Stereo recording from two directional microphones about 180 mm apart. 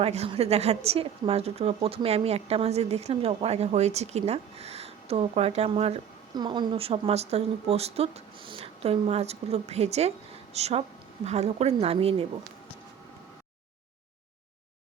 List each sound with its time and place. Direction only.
0.0 s a woman's voice: 35° right (ahead or behind)